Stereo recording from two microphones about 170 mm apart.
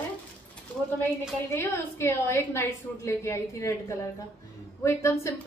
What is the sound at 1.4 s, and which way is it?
A woman's voice, 15° left (ahead or behind).